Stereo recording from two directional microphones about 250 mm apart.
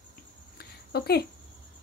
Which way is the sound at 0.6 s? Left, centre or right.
Left.